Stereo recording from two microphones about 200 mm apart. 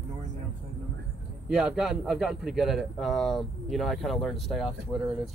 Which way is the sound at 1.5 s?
5° right (ahead or behind).